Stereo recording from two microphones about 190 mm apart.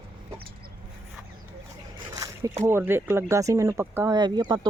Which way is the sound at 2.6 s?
10° right (ahead or behind).